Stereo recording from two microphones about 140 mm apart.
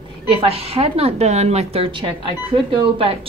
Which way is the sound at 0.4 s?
45° right (ahead or behind).